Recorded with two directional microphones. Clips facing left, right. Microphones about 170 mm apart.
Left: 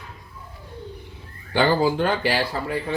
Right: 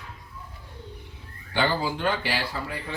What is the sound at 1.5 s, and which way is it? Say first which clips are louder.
Speech: left 6 dB; 40° left (ahead or behind).